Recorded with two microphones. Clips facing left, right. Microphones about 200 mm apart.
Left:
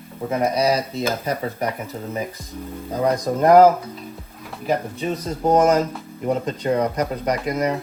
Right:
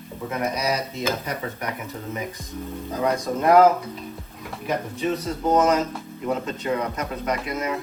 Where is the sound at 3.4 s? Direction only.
40° left (ahead or behind).